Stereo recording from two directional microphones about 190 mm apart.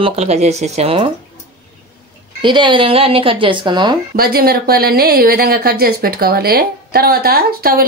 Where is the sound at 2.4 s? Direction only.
25° right (ahead or behind).